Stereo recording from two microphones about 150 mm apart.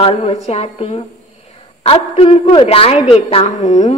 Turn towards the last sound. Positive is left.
turn(degrees=50)  # may be behind; listen again after turning